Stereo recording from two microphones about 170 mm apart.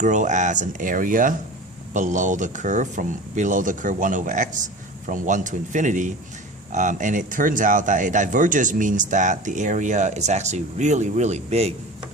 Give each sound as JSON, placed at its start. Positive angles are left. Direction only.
{"t": 0.0, "sound": "speech", "side_deg": -45}